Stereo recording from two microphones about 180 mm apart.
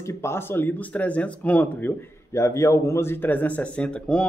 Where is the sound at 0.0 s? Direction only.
15° left (ahead or behind).